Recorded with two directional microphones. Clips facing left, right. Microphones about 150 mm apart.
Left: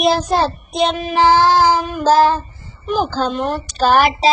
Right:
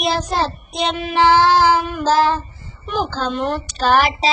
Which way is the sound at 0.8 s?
45° left (ahead or behind).